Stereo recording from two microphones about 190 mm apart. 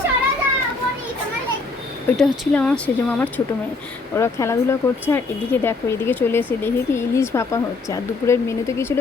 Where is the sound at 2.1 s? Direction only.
Centre (ahead or behind).